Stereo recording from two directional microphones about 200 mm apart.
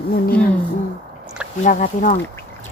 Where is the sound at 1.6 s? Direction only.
40° left (ahead or behind).